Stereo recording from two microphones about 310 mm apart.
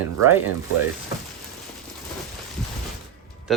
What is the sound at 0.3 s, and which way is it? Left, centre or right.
Speech, centre.